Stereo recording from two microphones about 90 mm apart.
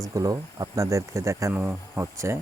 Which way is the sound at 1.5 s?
20° right (ahead or behind).